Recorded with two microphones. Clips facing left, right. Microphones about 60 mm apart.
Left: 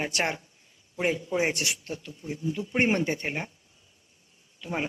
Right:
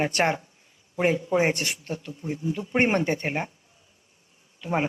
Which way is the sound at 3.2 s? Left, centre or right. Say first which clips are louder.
Right 4 dB; centre.